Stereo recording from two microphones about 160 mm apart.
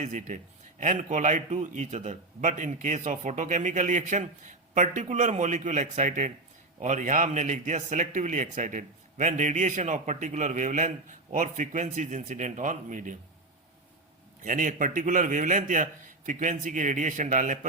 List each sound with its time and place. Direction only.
0.0 s a man's voice: 50° right (ahead or behind)
14.4 s a man's voice: 55° right (ahead or behind)